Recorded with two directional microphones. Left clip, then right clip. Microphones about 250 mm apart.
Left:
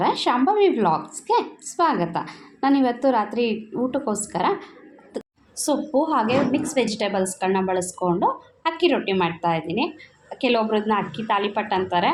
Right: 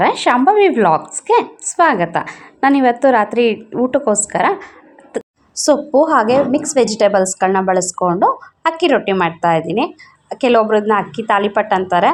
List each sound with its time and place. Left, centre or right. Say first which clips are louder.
0.0 s a woman's voice: right 8 dB; right
5.1 s a sound: right 9 dB; right
5.6 s a woman's voice: right 10 dB; right